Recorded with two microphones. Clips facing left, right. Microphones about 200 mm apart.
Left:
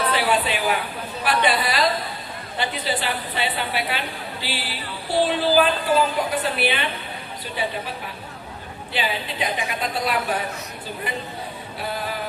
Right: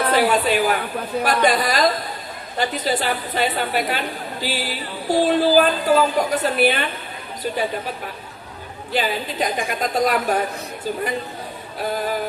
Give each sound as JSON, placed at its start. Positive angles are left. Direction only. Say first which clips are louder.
{"t": 0.1, "sound": "a woman's voice", "louder": "right 4 dB", "side_deg": -45}
{"t": 8.9, "sound": "a woman's voice", "louder": "right 4 dB", "side_deg": -45}